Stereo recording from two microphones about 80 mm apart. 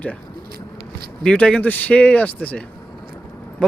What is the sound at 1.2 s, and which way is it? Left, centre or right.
Speech, centre.